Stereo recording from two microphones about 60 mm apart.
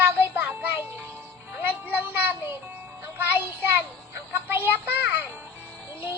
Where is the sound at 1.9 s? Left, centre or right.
Right.